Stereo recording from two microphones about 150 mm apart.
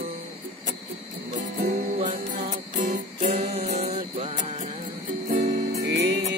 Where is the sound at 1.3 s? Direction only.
80° right.